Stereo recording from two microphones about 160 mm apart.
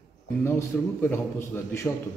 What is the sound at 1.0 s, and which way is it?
Speech, 15° left (ahead or behind).